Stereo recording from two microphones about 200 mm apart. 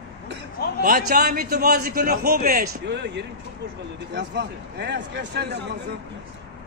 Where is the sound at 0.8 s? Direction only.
50° right (ahead or behind).